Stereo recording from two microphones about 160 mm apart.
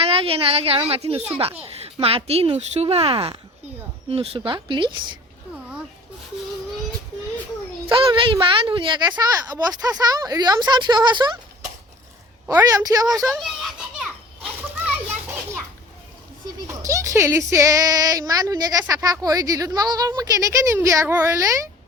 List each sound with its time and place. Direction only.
0.0 s a woman's voice: 35° right (ahead or behind)
7.9 s a woman's voice: 30° right (ahead or behind)
12.5 s speech: 20° right (ahead or behind)
13.1 s speech: centre (ahead or behind)
16.8 s speech: 20° right (ahead or behind)